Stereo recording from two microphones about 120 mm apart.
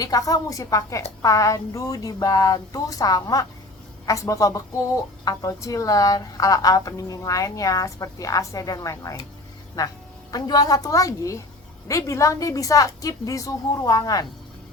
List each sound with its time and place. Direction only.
0.0 s a woman's voice: 30° left (ahead or behind)